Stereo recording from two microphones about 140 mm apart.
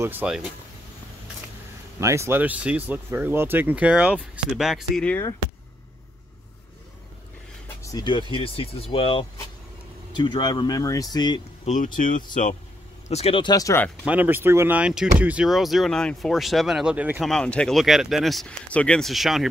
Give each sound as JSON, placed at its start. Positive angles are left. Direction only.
{"t": 0.0, "sound": "speech", "side_deg": -15}
{"t": 2.0, "sound": "speech", "side_deg": -20}
{"t": 5.0, "sound": "speech", "side_deg": 10}
{"t": 7.6, "sound": "speech", "side_deg": 25}
{"t": 11.6, "sound": "speech", "side_deg": 65}
{"t": 13.1, "sound": "speech", "side_deg": 45}
{"t": 13.5, "sound": "speech", "side_deg": 25}
{"t": 14.0, "sound": "speech", "side_deg": -10}
{"t": 17.2, "sound": "speech", "side_deg": 5}